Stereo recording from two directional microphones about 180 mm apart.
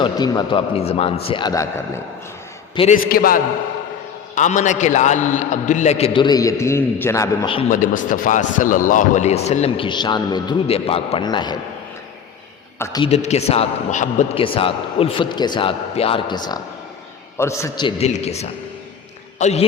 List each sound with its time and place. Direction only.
0.0 s a man's voice: 25° left (ahead or behind)
2.9 s a man's voice: 55° left (ahead or behind)
4.4 s speech: 40° left (ahead or behind); by 7.4 s 15° left (ahead or behind)
7.7 s speech: 50° left (ahead or behind); by 11.5 s 25° left (ahead or behind)
12.8 s a man's voice: 20° left (ahead or behind)
13.1 s speech: 35° left (ahead or behind)
14.4 s a man's voice: 30° left (ahead or behind)
17.8 s speech: 35° left (ahead or behind)